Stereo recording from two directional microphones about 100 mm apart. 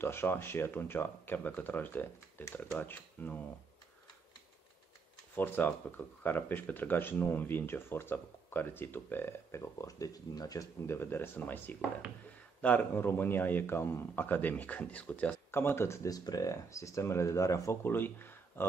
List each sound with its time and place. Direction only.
0.0 s speech: 25° left (ahead or behind)
5.3 s speech: 20° left (ahead or behind)